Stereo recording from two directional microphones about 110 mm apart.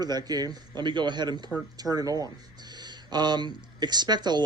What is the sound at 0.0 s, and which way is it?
A man's voice, 40° right (ahead or behind).